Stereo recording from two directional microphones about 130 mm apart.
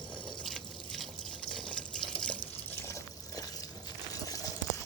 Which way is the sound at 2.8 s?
25° left (ahead or behind).